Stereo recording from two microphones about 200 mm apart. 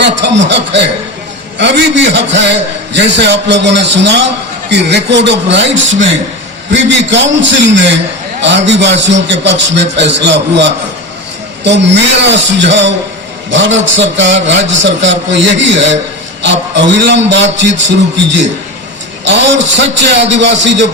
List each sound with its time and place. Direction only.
0.0 s a man's voice: 65° right (ahead or behind)